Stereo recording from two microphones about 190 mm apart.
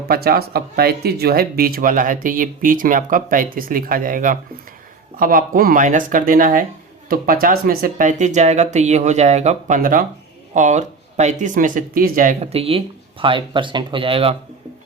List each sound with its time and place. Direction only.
0.1 s speech: 55° right (ahead or behind); by 14.3 s 30° right (ahead or behind)